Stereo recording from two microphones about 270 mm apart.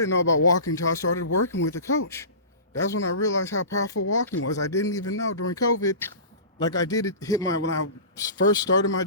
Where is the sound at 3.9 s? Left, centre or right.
Left.